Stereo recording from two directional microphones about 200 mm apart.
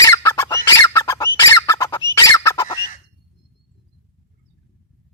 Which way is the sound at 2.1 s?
15° left (ahead or behind).